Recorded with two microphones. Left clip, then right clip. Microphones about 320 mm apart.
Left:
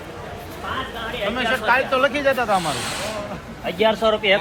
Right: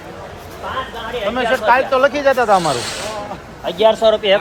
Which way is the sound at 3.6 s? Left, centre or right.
Right.